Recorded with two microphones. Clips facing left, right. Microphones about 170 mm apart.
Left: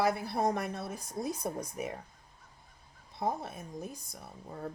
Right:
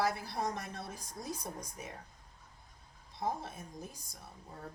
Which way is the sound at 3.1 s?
60° left (ahead or behind).